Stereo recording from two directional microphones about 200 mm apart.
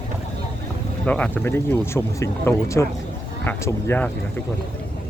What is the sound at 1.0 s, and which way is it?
Speech, 5° left (ahead or behind).